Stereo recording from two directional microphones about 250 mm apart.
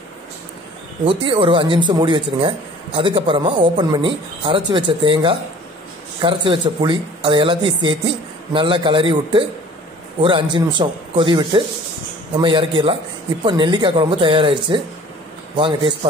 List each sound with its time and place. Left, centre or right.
1.0 s speech: centre